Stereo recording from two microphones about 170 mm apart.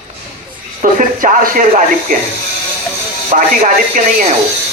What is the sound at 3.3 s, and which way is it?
Speech, 55° right (ahead or behind).